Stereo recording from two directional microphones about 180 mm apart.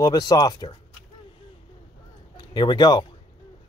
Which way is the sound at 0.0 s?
20° left (ahead or behind).